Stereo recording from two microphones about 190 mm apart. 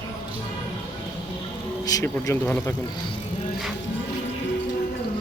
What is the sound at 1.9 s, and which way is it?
Speech, 20° left (ahead or behind).